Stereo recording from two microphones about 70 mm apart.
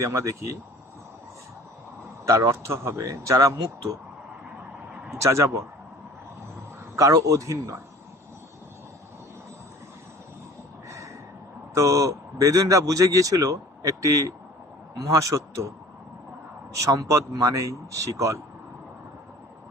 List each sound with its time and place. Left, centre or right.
0.0 s speech: right
2.2 s speech: right
5.2 s speech: right
6.9 s speech: right
10.8 s a sound: right
11.7 s a man's voice: right
16.8 s speech: right